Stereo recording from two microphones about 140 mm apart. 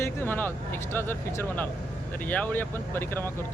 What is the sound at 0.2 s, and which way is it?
Speech, 15° left (ahead or behind).